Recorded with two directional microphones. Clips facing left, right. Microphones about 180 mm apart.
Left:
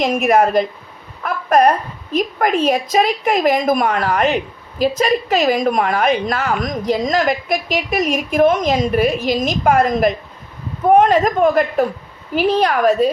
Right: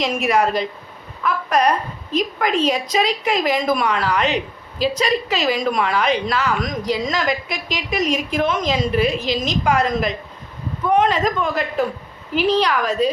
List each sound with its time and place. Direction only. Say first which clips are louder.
0.0 s a woman's voice: left 4 dB; 50° left (ahead or behind)